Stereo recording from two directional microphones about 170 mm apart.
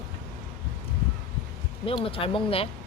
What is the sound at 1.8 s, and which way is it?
Speech, 35° left (ahead or behind).